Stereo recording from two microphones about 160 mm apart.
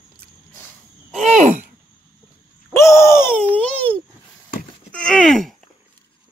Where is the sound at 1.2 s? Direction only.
45° right (ahead or behind).